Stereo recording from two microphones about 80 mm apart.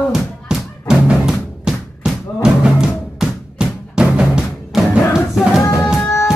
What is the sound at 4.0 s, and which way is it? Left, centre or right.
Music, centre.